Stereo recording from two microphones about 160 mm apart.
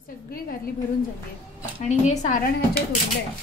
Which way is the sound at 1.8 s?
45° left (ahead or behind).